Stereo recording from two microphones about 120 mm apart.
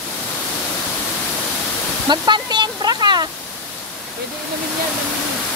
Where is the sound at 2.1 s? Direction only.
40° right (ahead or behind).